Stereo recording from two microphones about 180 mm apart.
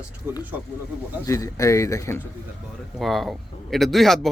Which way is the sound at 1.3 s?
15° left (ahead or behind).